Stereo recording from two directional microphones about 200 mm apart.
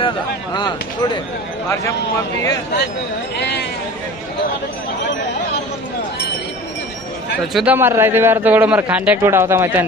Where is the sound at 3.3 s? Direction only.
55° left (ahead or behind).